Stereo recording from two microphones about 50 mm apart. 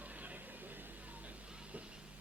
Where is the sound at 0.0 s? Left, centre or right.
Right.